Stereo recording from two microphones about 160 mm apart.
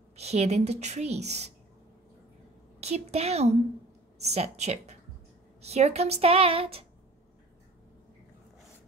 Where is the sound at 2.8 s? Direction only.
40° right (ahead or behind).